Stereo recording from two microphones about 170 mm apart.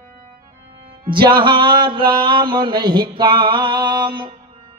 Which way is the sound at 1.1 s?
25° right (ahead or behind).